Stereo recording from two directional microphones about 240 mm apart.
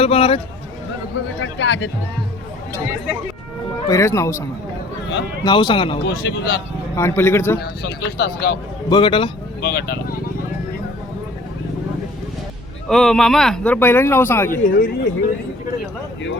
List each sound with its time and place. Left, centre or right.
0.0 s a man's voice: left
1.4 s speech: left
3.8 s a man's voice: centre
6.0 s speech: left
6.9 s a man's voice: centre
7.6 s speech: left
8.9 s a man's voice: left
9.6 s speech: left
12.9 s a man's voice: centre
14.6 s speech: left